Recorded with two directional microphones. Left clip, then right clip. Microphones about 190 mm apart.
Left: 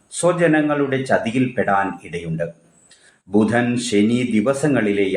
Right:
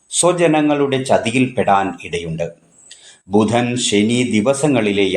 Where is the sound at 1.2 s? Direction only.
20° left (ahead or behind).